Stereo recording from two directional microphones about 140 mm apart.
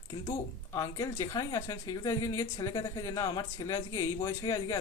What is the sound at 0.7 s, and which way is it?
Speech, 20° left (ahead or behind).